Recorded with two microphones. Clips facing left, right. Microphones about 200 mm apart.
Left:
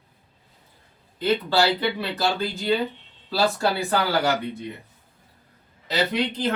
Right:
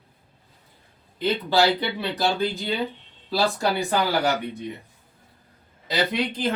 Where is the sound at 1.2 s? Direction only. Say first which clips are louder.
Even; 15° right (ahead or behind).